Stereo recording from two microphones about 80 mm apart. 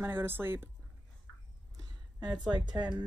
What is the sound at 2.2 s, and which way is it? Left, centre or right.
Speech, right.